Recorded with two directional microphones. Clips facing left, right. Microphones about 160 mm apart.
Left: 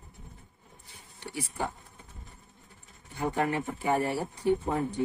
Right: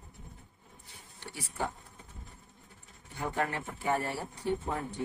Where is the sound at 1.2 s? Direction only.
15° left (ahead or behind).